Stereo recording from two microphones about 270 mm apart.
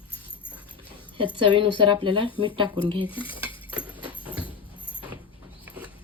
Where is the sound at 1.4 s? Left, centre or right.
Centre.